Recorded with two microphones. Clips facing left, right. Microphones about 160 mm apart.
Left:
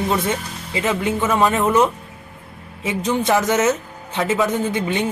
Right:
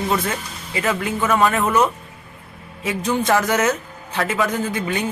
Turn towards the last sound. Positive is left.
turn(degrees=20)  # may be behind; listen again after turning